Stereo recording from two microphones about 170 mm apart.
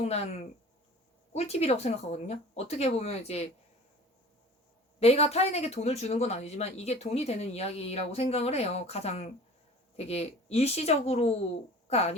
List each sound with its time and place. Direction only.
0.0 s speech: 45° left (ahead or behind)
4.9 s speech: 40° left (ahead or behind)